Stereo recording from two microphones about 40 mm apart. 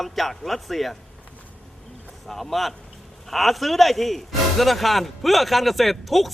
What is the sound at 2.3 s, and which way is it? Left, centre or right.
Speech, centre.